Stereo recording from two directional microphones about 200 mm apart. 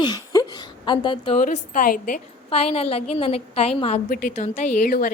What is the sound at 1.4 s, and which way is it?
Speech, 45° left (ahead or behind).